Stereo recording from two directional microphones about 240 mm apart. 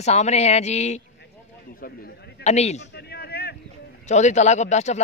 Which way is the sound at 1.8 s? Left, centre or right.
Left.